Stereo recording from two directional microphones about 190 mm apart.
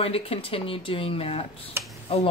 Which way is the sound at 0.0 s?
30° left (ahead or behind).